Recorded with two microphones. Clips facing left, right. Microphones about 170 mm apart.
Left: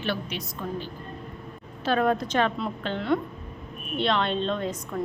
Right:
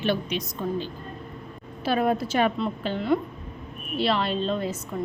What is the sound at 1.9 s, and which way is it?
A woman's voice, 10° right (ahead or behind).